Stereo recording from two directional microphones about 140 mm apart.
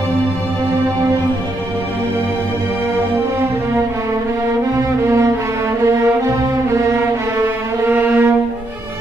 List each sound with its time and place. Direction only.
4.7 s cello: 20° right (ahead or behind)
7.9 s music: 15° right (ahead or behind)